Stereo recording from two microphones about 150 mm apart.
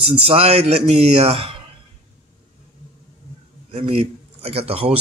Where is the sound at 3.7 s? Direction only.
40° right (ahead or behind).